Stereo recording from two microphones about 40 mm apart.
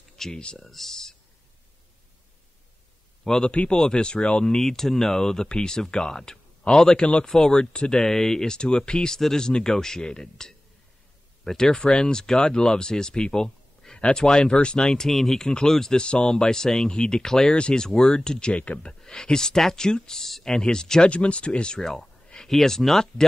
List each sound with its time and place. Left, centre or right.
0.1 s a sound: centre
0.6 s speech: centre
3.4 s speech: left
3.7 s speech: centre
4.6 s speech: centre; by 7.2 s left
7.2 s speech: centre
9.1 s speech: centre
11.8 s speech: left
14.9 s speech: centre
18.5 s speech: left
18.9 s speech: centre
21.1 s speech: left
22.5 s speech: centre